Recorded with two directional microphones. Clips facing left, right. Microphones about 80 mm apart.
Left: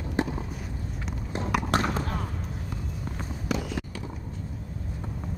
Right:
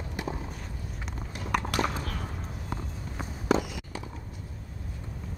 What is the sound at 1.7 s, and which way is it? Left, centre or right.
Basketball bounce, left.